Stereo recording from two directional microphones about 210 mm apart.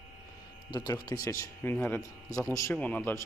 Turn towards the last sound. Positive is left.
turn(degrees=10)  # may be behind; listen again after turning